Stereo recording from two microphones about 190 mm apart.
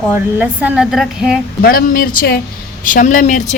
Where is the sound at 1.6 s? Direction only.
50° left (ahead or behind).